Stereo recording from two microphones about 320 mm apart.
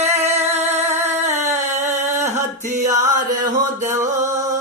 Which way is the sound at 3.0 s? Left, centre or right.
Right.